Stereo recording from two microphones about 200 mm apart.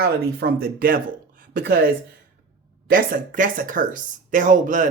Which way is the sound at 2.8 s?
45° right (ahead or behind).